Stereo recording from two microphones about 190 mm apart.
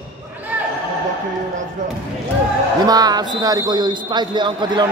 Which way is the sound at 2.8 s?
20° right (ahead or behind).